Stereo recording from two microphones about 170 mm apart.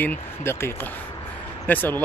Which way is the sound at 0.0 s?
10° left (ahead or behind).